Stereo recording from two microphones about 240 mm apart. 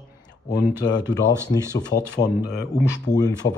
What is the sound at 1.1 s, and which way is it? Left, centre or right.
Speech, centre.